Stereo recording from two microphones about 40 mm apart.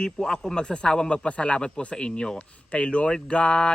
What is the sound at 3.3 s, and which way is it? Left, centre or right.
Speech, centre.